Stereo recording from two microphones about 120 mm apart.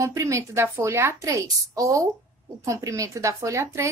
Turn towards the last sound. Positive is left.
turn(degrees=-25)  # may be behind; listen again after turning